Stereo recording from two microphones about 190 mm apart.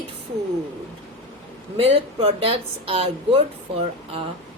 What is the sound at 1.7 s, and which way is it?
Speech, 30° right (ahead or behind).